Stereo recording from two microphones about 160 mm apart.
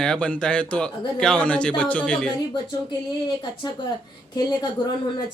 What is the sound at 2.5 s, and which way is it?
Speech, 25° left (ahead or behind).